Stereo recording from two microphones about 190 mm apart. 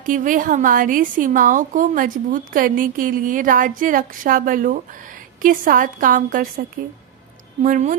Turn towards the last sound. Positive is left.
turn(degrees=-45)  # may be behind; listen again after turning